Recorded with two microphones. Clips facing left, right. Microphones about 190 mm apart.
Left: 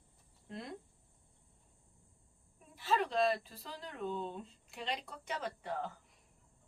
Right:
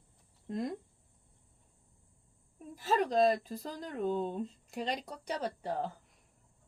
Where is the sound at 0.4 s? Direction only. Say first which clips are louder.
Right 10 dB; 45° right (ahead or behind).